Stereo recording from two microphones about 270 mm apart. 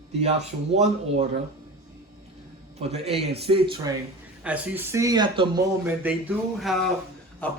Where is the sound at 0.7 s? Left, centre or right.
Right.